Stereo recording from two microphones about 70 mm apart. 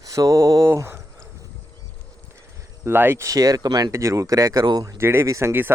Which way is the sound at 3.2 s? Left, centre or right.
Right.